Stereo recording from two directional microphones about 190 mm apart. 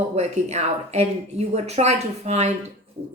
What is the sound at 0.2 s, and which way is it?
Speech, 35° right (ahead or behind).